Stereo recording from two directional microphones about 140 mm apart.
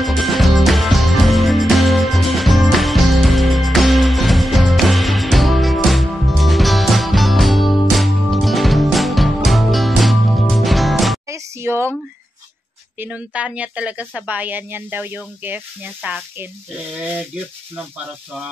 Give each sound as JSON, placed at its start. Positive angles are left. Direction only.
{"t": 0.0, "sound": "music", "side_deg": 0}
{"t": 11.2, "sound": "music", "side_deg": -20}
{"t": 13.0, "sound": "a woman's voice", "side_deg": -10}